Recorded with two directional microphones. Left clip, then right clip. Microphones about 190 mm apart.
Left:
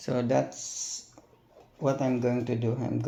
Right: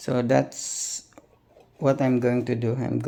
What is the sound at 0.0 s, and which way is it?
Speech, 40° right (ahead or behind).